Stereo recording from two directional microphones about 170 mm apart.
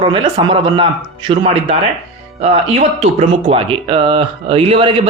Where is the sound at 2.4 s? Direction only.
40° right (ahead or behind).